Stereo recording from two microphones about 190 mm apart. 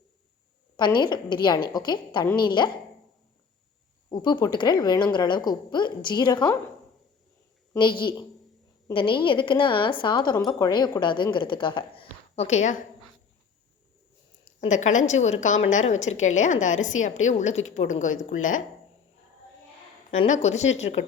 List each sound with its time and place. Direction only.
0.9 s a woman's voice: 25° left (ahead or behind)
4.1 s a woman's voice: 20° left (ahead or behind)
7.8 s a woman's voice: 25° left (ahead or behind)
14.7 s a woman's voice: 40° left (ahead or behind)
20.1 s a woman's voice: 35° left (ahead or behind)